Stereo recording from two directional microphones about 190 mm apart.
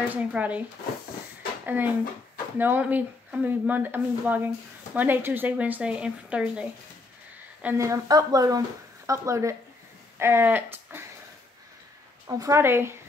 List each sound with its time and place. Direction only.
0.1 s speech: 10° right (ahead or behind)
1.7 s speech: 10° right (ahead or behind)
12.3 s speech: 15° right (ahead or behind)